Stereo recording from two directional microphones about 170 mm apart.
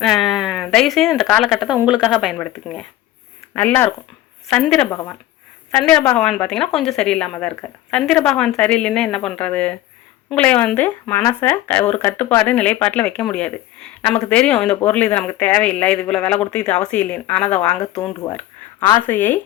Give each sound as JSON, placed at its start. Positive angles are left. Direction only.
{"t": 0.0, "sound": "speech", "side_deg": 0}